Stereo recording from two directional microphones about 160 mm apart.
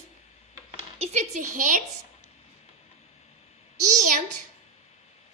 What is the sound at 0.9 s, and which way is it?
Speech, 45° right (ahead or behind).